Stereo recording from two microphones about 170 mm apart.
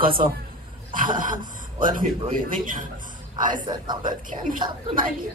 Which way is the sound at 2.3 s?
50° right (ahead or behind).